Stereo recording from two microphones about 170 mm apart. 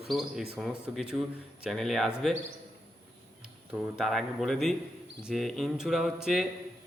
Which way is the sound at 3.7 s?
Centre (ahead or behind).